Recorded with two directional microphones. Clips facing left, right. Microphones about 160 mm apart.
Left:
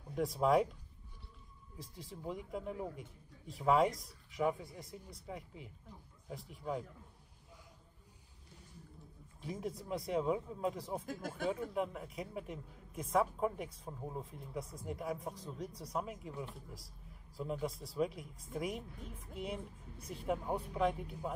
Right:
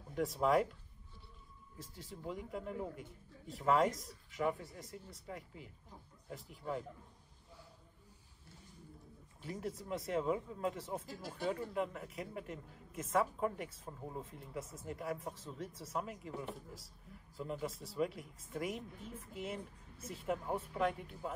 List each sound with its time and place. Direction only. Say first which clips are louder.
0.1 s a man's voice: left 1 dB; centre (ahead or behind)
1.8 s a man's voice: left 1 dB; centre (ahead or behind)
9.4 s a man's voice: left 1 dB; centre (ahead or behind)
11.1 s speech: left 4 dB; 50° left (ahead or behind)
11.4 s a man's voice: left 1 dB; centre (ahead or behind)